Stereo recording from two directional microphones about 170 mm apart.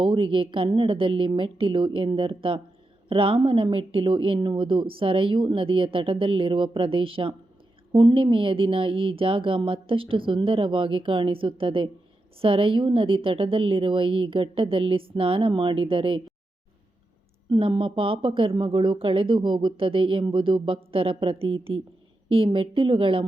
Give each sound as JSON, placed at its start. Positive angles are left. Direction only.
{"t": 0.0, "sound": "a woman's voice", "side_deg": -30}
{"t": 17.5, "sound": "a woman's voice", "side_deg": -30}